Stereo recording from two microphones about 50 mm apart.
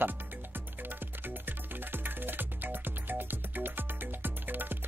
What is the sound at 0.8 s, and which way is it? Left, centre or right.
Music, right.